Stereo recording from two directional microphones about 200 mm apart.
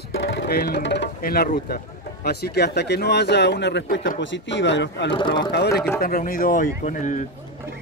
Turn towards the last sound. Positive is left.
turn(degrees=40)  # may be behind; listen again after turning